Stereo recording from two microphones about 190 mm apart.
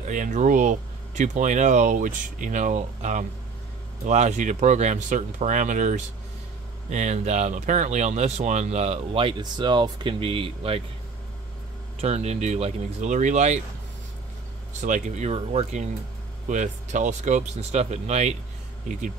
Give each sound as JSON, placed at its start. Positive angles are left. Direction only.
{"t": 0.0, "sound": "speech", "side_deg": -40}
{"t": 12.0, "sound": "speech", "side_deg": -35}
{"t": 14.7, "sound": "speech", "side_deg": -40}